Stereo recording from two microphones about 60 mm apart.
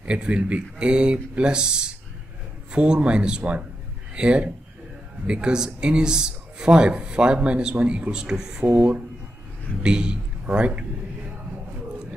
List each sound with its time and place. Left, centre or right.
0.0 s speech: centre
8.6 s speech: right
9.8 s a man's voice: centre